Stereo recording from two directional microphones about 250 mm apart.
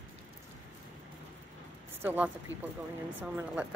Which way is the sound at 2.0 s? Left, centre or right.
Centre.